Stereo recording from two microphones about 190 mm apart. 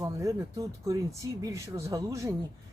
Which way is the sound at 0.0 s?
15° right (ahead or behind).